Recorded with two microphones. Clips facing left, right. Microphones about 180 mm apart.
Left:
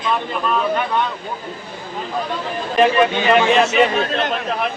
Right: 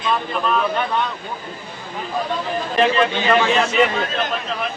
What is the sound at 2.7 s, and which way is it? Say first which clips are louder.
Speech: left 3 dB; 15° left (ahead or behind).